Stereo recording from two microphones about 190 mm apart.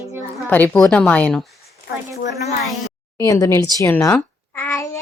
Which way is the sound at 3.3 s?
15° left (ahead or behind).